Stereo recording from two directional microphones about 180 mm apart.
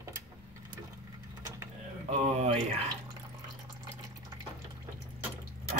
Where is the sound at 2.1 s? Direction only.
35° right (ahead or behind).